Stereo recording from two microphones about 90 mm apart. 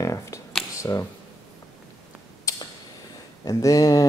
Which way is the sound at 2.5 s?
40° left (ahead or behind).